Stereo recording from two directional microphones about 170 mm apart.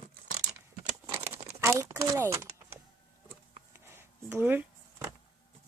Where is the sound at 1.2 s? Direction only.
15° right (ahead or behind).